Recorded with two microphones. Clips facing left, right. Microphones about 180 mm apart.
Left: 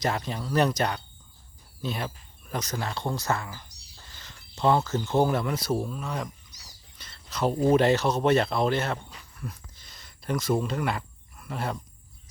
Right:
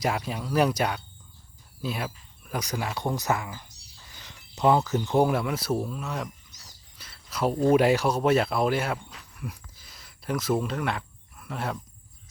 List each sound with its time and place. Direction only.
0.0 s speech: 10° right (ahead or behind)
4.1 s a sound: 15° right (ahead or behind)
5.1 s speech: 10° right (ahead or behind)
6.9 s a sound: 5° right (ahead or behind)
7.7 s speech: 10° right (ahead or behind)
9.4 s cricket: 10° right (ahead or behind)